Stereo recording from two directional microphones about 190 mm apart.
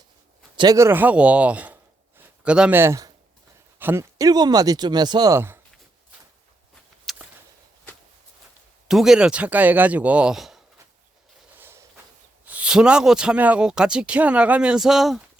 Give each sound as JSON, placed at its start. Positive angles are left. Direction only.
{"t": 0.5, "sound": "speech", "side_deg": -20}
{"t": 7.0, "sound": "whip", "side_deg": 0}
{"t": 8.9, "sound": "speech", "side_deg": 0}
{"t": 11.5, "sound": "a sound", "side_deg": -10}
{"t": 12.5, "sound": "speech", "side_deg": -5}